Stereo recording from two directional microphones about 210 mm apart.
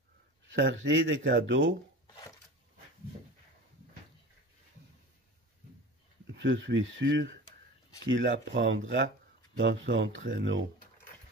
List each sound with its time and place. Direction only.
0.5 s speech: 65° right (ahead or behind)
6.3 s speech: 60° right (ahead or behind)